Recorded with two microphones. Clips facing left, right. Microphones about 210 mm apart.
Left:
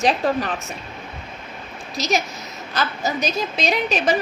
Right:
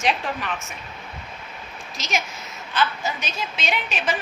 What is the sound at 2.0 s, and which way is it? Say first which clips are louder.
A woman's voice: left 6 dB; 35° left (ahead or behind).